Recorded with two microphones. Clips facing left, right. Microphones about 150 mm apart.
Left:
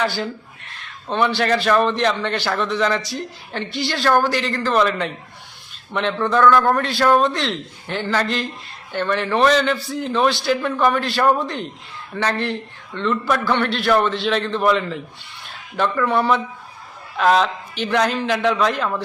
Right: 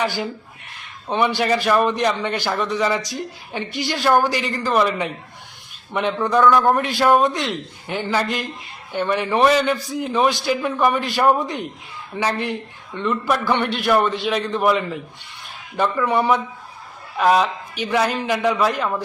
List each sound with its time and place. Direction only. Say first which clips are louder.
0.0 s a man's voice: left 1 dB; 15° right (ahead or behind)
6.9 s a man's voice: left 1 dB; 5° right (ahead or behind)
11.3 s a man's voice: even; centre (ahead or behind)
12.1 s a man's voice: left 1 dB; 15° right (ahead or behind)